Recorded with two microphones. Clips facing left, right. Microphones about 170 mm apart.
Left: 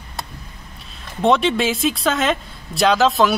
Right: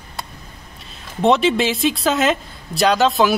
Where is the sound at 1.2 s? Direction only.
Centre (ahead or behind).